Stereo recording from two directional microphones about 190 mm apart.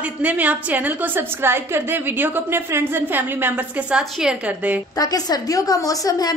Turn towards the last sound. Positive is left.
turn(degrees=20)  # may be behind; listen again after turning